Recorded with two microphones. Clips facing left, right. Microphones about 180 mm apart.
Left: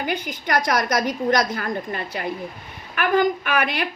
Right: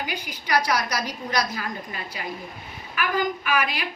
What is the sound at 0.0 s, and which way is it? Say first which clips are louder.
A woman's voice: left 6 dB; 50° left (ahead or behind).